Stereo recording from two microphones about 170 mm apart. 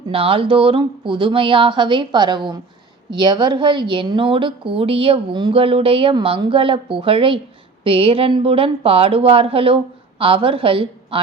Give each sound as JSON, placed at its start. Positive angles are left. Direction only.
{"t": 0.1, "sound": "a woman's voice", "side_deg": -30}